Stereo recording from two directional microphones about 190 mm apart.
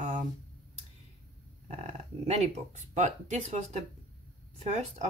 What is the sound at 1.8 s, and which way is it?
Speech, 35° right (ahead or behind).